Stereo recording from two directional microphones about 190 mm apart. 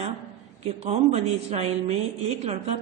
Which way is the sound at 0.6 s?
35° right (ahead or behind).